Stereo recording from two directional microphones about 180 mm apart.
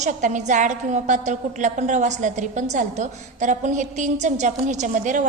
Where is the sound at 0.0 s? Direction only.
45° right (ahead or behind).